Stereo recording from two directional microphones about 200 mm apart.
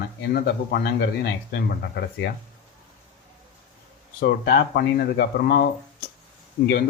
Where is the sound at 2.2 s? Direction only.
55° left (ahead or behind).